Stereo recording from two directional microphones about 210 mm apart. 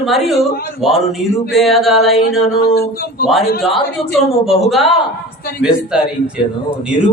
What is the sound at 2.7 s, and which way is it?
Speech, 45° left (ahead or behind).